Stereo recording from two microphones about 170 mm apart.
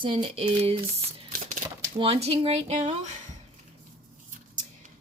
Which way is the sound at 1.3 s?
50° right (ahead or behind).